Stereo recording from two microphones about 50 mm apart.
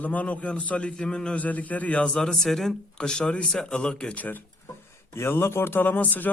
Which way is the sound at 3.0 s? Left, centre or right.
Centre.